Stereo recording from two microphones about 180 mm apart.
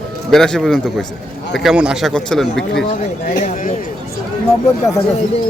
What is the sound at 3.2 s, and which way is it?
Speech, 45° left (ahead or behind).